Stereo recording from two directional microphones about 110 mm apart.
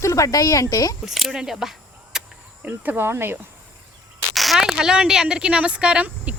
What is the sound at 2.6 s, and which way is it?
Speech, 15° right (ahead or behind).